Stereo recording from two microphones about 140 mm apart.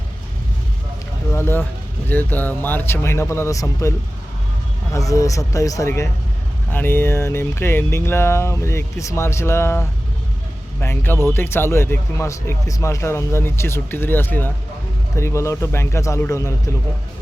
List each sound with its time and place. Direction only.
1.3 s a sound: 15° left (ahead or behind)
2.0 s speech: 15° left (ahead or behind)
4.9 s a man's voice: 25° left (ahead or behind)